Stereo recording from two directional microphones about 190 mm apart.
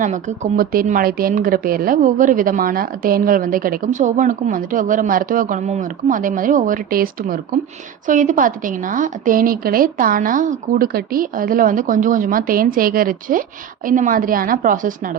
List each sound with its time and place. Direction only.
0.0 s a woman's voice: 40° right (ahead or behind)